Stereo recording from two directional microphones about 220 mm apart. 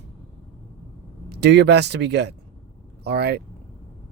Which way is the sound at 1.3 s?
50° right (ahead or behind).